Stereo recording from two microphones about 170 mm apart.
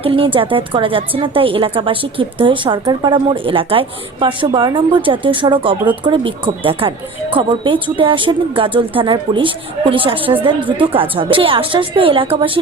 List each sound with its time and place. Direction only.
0.0 s speech: 30° right (ahead or behind)